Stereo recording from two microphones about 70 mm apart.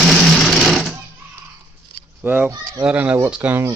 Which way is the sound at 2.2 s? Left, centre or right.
Right.